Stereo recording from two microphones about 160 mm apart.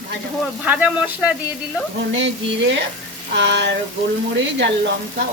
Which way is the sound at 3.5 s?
90° right.